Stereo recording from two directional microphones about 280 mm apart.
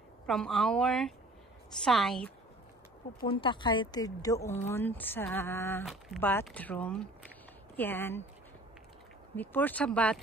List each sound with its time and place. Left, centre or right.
0.3 s speech: centre
3.2 s speech: centre
9.4 s speech: centre